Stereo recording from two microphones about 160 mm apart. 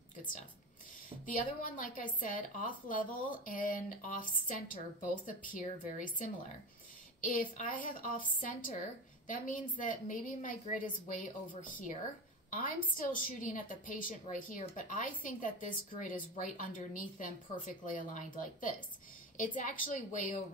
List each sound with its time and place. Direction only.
1.2 s speech: 55° left (ahead or behind)